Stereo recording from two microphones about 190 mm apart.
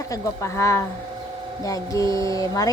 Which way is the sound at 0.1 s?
15° left (ahead or behind).